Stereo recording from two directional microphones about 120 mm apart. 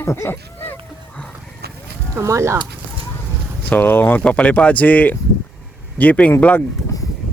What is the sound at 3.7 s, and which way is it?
Speech, 15° left (ahead or behind).